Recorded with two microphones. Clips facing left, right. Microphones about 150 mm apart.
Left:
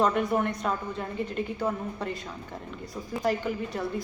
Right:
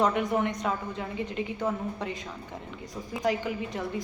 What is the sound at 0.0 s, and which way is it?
Speech, 20° right (ahead or behind).